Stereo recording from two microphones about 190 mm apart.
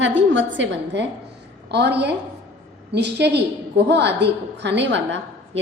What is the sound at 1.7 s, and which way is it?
A woman's voice, 60° right (ahead or behind).